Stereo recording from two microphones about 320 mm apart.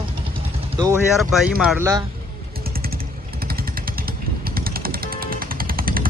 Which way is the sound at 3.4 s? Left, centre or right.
Right.